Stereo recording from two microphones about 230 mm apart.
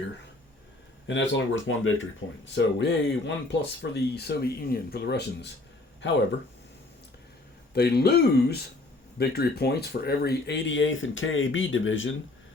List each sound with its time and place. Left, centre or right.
1.0 s speech: left
7.7 s speech: left